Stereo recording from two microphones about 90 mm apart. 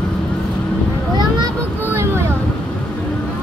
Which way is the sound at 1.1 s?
50° right (ahead or behind).